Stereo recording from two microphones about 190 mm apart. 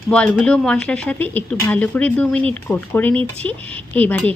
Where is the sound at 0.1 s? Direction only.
5° left (ahead or behind).